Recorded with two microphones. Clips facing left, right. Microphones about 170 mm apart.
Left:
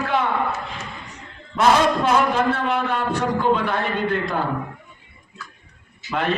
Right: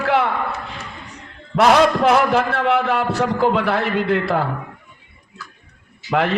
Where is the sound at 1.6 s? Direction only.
75° right (ahead or behind).